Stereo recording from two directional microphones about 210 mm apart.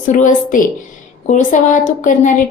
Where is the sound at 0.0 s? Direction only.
35° left (ahead or behind).